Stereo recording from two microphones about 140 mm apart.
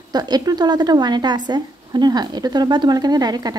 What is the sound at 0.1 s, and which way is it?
A woman's voice, 30° right (ahead or behind).